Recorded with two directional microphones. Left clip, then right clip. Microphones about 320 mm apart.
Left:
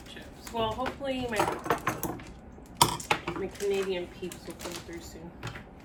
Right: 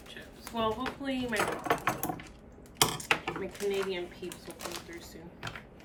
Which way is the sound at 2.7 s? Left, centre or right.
Centre.